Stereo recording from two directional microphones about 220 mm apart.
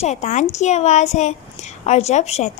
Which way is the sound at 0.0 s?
30° left (ahead or behind).